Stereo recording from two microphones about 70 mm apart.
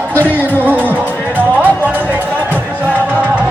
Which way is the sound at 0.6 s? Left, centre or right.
Right.